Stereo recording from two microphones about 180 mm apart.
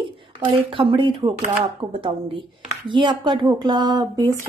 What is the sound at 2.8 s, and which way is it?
Speech, 25° right (ahead or behind).